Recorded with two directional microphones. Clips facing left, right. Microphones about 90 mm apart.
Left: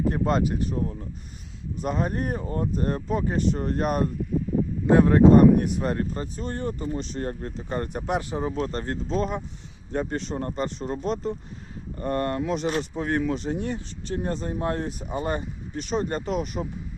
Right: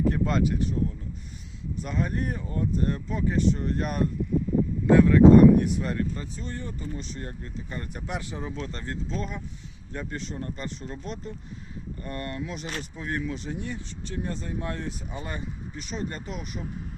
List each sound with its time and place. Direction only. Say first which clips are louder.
0.1 s speech: left 2 dB; 35° left (ahead or behind)
6.3 s speech: left 6 dB; 55° left (ahead or behind)
9.9 s speech: left 7 dB; 40° left (ahead or behind)
11.0 s speech: left 12 dB; 25° left (ahead or behind)
11.9 s speech: left 9 dB; 45° left (ahead or behind)
12.6 s speech: left 9 dB; 25° left (ahead or behind)
13.0 s speech: left 4 dB; 40° left (ahead or behind)
13.2 s speech: left 6 dB; 60° left (ahead or behind)
13.5 s speech: left 5 dB; 45° left (ahead or behind)
16.2 s speech: left 9 dB; 75° left (ahead or behind)